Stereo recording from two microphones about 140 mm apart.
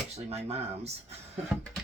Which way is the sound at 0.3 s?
50° right (ahead or behind).